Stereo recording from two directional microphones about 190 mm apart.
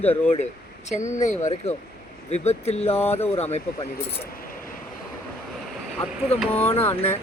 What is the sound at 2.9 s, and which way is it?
Speech, 10° left (ahead or behind).